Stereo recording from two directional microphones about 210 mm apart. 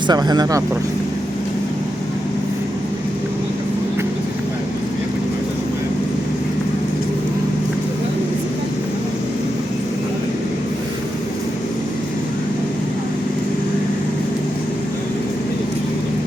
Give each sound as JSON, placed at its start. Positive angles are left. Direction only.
{"t": 0.1, "sound": "speech", "side_deg": -20}